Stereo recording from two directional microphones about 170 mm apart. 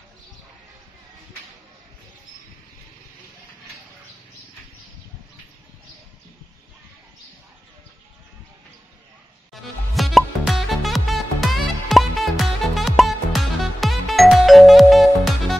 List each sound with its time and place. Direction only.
9.5 s music: centre (ahead or behind)